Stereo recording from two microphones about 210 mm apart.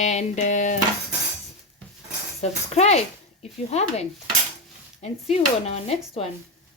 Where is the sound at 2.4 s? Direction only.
30° left (ahead or behind).